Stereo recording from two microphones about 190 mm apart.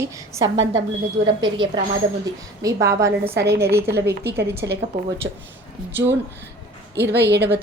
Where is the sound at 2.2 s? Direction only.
20° right (ahead or behind).